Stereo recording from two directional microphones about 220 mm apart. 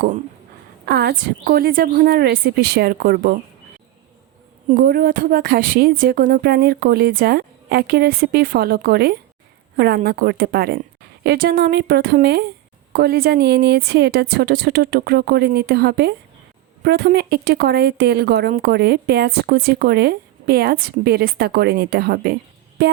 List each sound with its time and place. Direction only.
0.9 s a woman's voice: 45° right (ahead or behind)
4.7 s a woman's voice: 40° right (ahead or behind)
22.8 s music: 50° right (ahead or behind)